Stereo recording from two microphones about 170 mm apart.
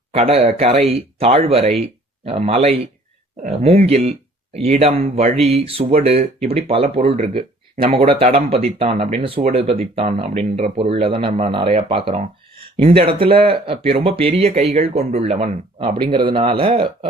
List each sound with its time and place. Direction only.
0.1 s speech: 35° right (ahead or behind)
3.8 s speech: 40° right (ahead or behind)